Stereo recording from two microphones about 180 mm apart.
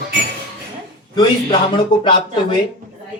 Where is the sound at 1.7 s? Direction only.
25° left (ahead or behind).